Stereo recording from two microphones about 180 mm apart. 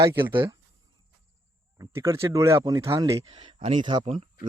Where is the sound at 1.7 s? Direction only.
15° right (ahead or behind).